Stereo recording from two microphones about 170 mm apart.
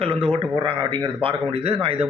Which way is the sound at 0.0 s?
35° right (ahead or behind).